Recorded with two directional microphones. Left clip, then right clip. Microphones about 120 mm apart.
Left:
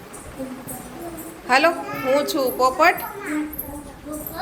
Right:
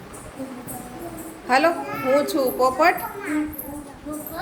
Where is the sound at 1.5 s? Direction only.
30° right (ahead or behind).